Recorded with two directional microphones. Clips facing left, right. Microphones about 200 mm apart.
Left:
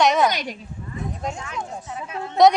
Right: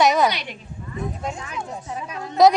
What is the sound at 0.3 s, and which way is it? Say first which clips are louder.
Speech: left 1 dB; 45° left (ahead or behind).